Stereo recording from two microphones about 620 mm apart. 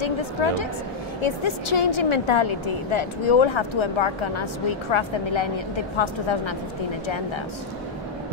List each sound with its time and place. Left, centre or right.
0.0 s a woman's voice: left